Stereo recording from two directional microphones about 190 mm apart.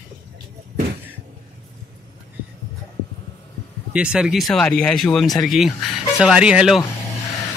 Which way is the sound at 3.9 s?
5° right (ahead or behind).